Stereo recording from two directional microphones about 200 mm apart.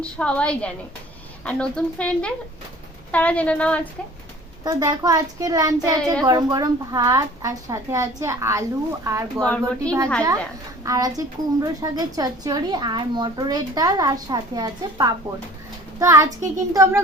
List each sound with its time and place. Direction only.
0.0 s a woman's voice: 5° left (ahead or behind)
4.6 s a woman's voice: 20° right (ahead or behind)
9.8 s a woman's voice: 5° left (ahead or behind)
10.8 s a woman's voice: 15° right (ahead or behind)